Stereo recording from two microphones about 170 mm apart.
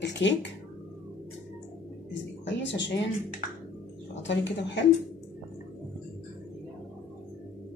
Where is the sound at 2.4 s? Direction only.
90° left.